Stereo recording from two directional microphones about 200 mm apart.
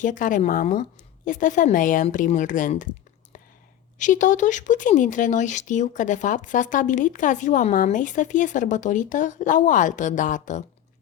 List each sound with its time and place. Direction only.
0.0 s speech: 40° left (ahead or behind)
3.9 s speech: 40° left (ahead or behind)